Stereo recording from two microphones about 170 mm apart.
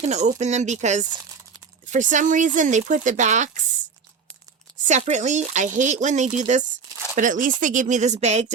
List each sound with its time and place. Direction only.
0.0 s speech: 40° right (ahead or behind)
4.9 s speech: 45° right (ahead or behind)